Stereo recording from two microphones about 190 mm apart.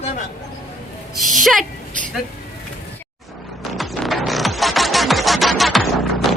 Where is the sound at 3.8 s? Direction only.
Centre (ahead or behind).